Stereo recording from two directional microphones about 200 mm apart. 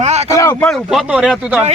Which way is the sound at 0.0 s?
35° right (ahead or behind).